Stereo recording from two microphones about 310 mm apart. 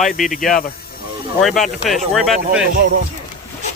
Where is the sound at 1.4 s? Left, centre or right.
Centre.